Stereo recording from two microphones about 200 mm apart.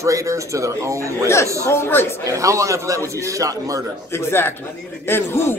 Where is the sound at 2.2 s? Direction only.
15° right (ahead or behind).